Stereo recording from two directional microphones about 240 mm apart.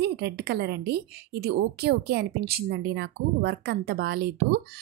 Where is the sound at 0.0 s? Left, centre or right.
Right.